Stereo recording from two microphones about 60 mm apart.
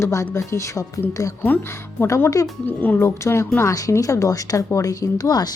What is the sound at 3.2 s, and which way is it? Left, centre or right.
Speech, left.